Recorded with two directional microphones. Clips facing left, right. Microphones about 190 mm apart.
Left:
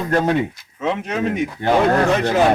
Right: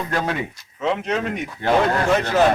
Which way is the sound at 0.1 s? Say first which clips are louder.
Left 7 dB; 35° left (ahead or behind).